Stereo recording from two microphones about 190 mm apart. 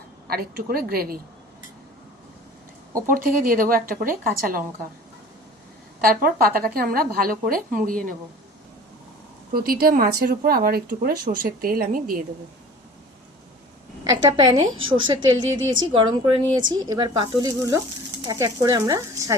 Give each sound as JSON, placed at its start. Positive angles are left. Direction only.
{"t": 0.3, "sound": "speech", "side_deg": -55}
{"t": 3.1, "sound": "speech", "side_deg": -50}
{"t": 6.0, "sound": "speech", "side_deg": -50}
{"t": 9.5, "sound": "speech", "side_deg": -50}
{"t": 14.0, "sound": "a woman's voice", "side_deg": -20}